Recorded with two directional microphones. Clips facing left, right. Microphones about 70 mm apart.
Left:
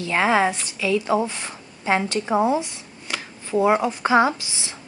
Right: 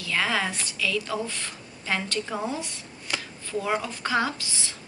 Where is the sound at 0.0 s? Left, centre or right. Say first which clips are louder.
Left 8 dB; left.